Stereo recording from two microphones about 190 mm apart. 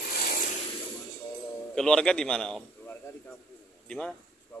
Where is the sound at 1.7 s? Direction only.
5° left (ahead or behind).